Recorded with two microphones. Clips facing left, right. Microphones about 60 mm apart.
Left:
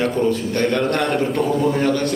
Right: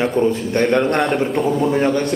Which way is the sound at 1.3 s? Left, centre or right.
Centre.